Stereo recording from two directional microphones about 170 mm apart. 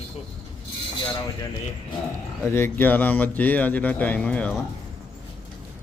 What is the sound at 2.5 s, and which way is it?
Speech, 15° left (ahead or behind).